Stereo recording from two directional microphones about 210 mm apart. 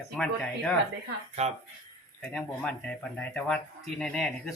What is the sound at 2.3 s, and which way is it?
Speech, 5° left (ahead or behind).